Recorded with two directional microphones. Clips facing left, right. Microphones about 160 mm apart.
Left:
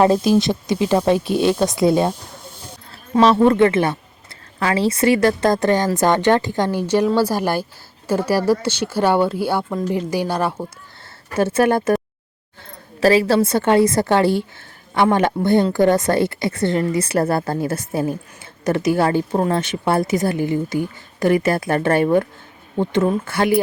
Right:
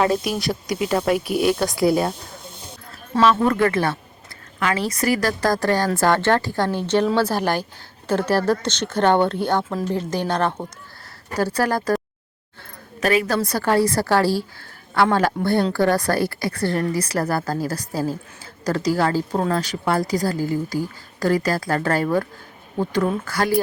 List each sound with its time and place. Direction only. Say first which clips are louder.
0.0 s a woman's voice: left 6 dB; 25° left (ahead or behind)
2.0 s a sound: left 4 dB; 10° left (ahead or behind)
3.2 s a woman's voice: left 4 dB; 35° left (ahead or behind); by 10.5 s 10° left (ahead or behind)
11.3 s a woman's voice: left 5 dB; 20° left (ahead or behind)
13.0 s a woman's voice: left 5 dB; 30° left (ahead or behind)